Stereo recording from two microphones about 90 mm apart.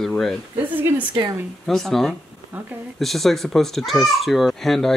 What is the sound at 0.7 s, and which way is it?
Speech, 20° right (ahead or behind).